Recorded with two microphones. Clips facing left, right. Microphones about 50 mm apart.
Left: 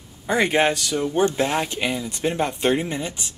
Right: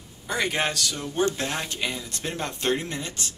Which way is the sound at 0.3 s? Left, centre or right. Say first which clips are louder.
Left 7 dB; left.